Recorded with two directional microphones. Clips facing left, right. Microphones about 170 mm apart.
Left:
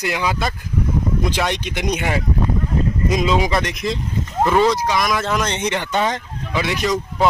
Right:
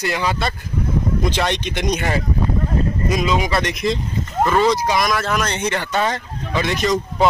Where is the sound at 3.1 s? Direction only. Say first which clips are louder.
Left 2 dB; 20° left (ahead or behind).